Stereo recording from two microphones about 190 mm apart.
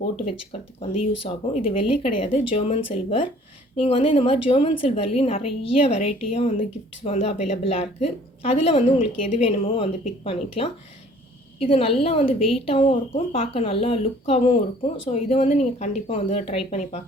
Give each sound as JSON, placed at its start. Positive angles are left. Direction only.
{"t": 0.5, "sound": "a woman's voice", "side_deg": 30}